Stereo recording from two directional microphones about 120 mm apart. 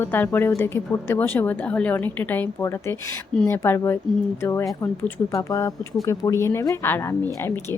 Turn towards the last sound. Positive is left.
turn(degrees=20)  # may be behind; listen again after turning